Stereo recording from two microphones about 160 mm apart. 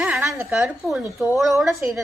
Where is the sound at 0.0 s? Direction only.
10° right (ahead or behind).